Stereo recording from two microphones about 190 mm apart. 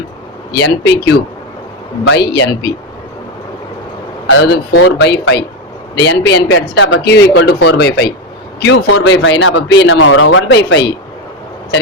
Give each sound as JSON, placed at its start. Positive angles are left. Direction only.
{"t": 0.5, "sound": "speech", "side_deg": 65}
{"t": 4.3, "sound": "speech", "side_deg": 60}
{"t": 8.6, "sound": "a man's voice", "side_deg": 75}